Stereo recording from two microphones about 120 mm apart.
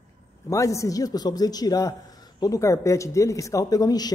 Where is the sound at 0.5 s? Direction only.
25° left (ahead or behind).